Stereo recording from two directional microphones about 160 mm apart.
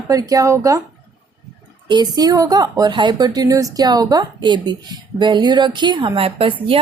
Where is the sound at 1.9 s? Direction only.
25° right (ahead or behind).